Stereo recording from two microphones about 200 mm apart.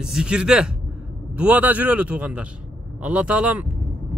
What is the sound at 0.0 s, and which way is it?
Speech, 5° right (ahead or behind).